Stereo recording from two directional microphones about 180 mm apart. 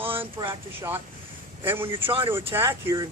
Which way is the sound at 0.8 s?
15° right (ahead or behind).